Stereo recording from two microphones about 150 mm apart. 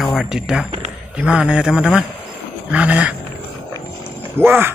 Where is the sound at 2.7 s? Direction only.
10° right (ahead or behind).